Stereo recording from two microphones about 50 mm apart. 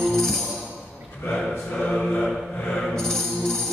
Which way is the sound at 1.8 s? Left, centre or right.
Centre.